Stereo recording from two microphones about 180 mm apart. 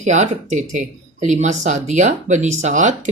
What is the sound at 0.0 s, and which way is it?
Speech, 40° right (ahead or behind).